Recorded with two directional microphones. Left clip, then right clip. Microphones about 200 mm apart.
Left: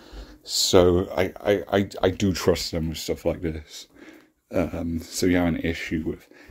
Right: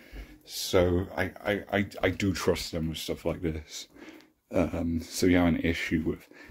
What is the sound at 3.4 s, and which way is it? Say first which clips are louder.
Speech: left 3 dB; 10° left (ahead or behind).